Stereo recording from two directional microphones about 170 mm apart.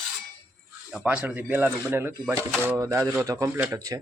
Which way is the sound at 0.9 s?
5° right (ahead or behind).